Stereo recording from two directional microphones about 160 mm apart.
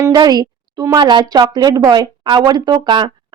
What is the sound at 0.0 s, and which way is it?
A woman's voice, 25° right (ahead or behind).